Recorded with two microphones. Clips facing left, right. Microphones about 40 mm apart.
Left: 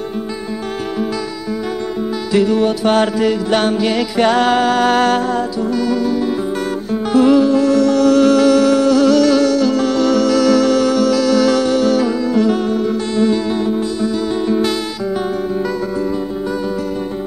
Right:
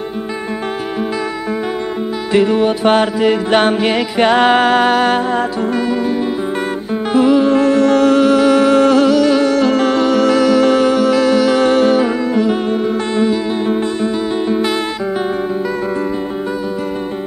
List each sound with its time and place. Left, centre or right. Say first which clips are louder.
2.3 s music: right 2 dB; right
4.9 s music: even; centre
5.3 s music: right 2 dB; right
7.4 s music: right 1 dB; right
8.2 s humming: even; centre
9.0 s music: even; right